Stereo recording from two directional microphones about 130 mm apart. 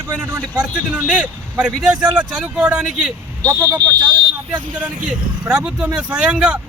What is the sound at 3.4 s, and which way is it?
Speech, 20° right (ahead or behind).